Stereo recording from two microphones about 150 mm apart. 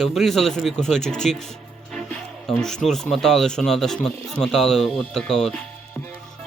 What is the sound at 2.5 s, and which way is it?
Speech, 5° left (ahead or behind).